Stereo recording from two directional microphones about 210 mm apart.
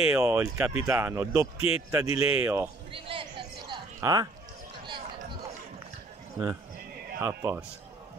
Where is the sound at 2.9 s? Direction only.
25° right (ahead or behind).